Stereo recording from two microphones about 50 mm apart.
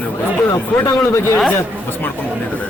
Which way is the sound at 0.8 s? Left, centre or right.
Left.